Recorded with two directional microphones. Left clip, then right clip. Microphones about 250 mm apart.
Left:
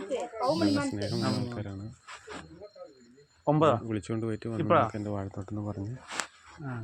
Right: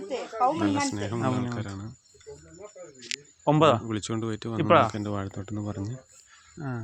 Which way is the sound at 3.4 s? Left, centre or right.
Right.